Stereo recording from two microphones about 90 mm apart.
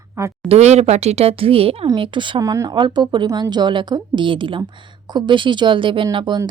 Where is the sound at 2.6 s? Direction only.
60° right (ahead or behind).